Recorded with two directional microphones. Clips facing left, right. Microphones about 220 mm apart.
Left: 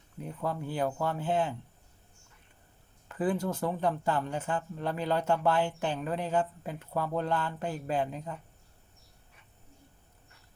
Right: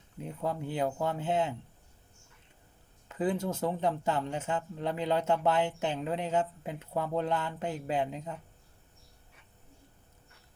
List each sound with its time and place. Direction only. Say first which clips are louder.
0.2 s speech: even; 20° right (ahead or behind)
3.1 s speech: left 1 dB; 20° right (ahead or behind)